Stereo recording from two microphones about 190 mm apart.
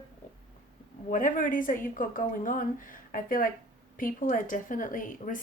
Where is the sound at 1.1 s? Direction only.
45° left (ahead or behind).